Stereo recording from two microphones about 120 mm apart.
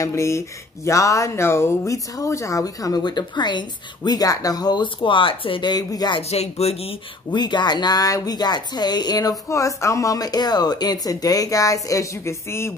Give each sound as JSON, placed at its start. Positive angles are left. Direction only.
{"t": 0.0, "sound": "speech", "side_deg": 25}
{"t": 6.3, "sound": "speech", "side_deg": 60}
{"t": 7.2, "sound": "speech", "side_deg": 35}